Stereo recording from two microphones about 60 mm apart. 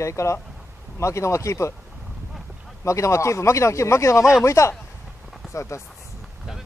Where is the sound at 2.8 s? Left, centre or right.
Left.